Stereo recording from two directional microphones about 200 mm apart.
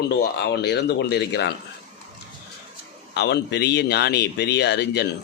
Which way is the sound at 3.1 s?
55° left (ahead or behind).